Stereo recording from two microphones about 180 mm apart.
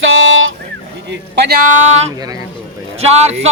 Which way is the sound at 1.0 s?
70° right (ahead or behind).